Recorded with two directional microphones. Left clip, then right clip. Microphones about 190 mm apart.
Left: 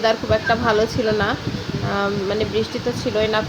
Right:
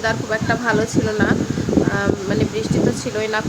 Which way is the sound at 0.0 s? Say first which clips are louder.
Left 3 dB; 10° left (ahead or behind).